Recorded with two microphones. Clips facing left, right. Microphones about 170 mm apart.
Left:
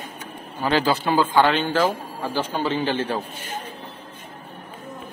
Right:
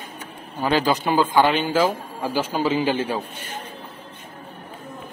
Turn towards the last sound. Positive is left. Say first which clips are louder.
# right 2 dB
turn(degrees=-10)  # may be behind; listen again after turning